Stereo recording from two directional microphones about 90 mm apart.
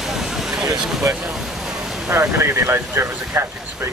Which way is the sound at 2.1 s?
25° right (ahead or behind).